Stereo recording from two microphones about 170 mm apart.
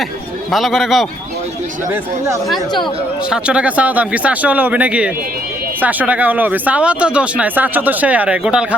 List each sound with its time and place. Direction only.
0.5 s a man's voice: centre (ahead or behind)
1.9 s speech: 15° right (ahead or behind)
2.8 s speech: 5° right (ahead or behind)